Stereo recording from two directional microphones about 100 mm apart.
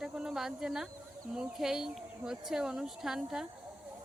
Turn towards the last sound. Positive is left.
turn(degrees=-5)  # may be behind; listen again after turning